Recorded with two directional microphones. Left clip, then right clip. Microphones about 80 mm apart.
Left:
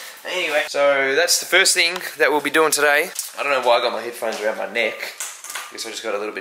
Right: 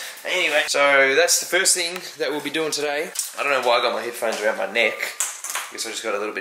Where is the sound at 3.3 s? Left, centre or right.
Centre.